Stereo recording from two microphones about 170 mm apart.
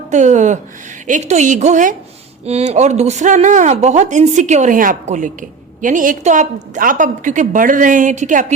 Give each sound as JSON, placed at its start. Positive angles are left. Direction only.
{"t": 0.1, "sound": "speech", "side_deg": -45}